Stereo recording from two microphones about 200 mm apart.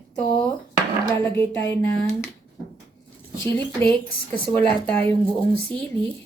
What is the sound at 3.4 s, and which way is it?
Speech, 10° left (ahead or behind).